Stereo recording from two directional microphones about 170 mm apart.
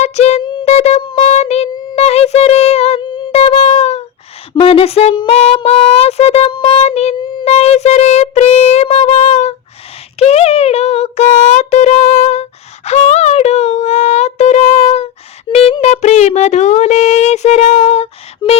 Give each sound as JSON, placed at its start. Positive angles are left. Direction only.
{"t": 0.0, "sound": "music", "side_deg": 40}
{"t": 0.4, "sound": "a sound", "side_deg": 25}
{"t": 0.7, "sound": "music", "side_deg": 40}
{"t": 4.5, "sound": "speech", "side_deg": 35}